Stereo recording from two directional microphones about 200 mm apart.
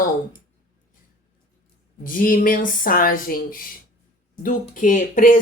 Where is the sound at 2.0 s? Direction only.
45° left (ahead or behind).